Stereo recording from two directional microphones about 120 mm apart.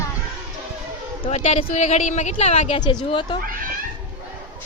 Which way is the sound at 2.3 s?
60° left (ahead or behind).